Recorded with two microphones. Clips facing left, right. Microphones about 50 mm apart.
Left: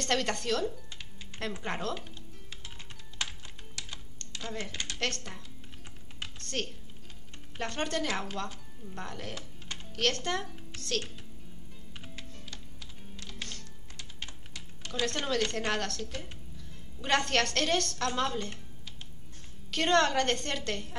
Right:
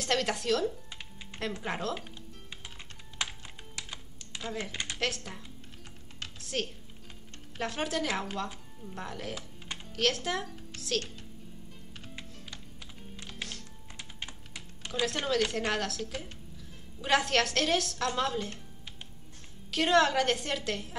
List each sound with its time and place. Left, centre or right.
0.0 s a woman's voice: centre
3.2 s typing: centre
4.9 s a woman's voice: centre
6.4 s a woman's voice: centre
13.1 s music: right
13.4 s music: centre
13.9 s typing: centre
14.9 s a woman's voice: centre
19.7 s a woman's voice: centre